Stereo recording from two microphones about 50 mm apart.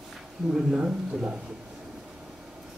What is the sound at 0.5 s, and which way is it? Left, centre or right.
Speech, centre.